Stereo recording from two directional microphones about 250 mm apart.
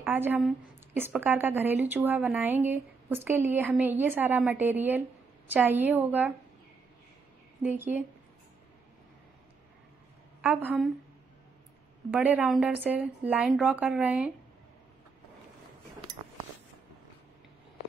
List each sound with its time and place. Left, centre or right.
0.0 s a woman's voice: centre
7.6 s a woman's voice: centre
10.4 s speech: centre
12.1 s speech: centre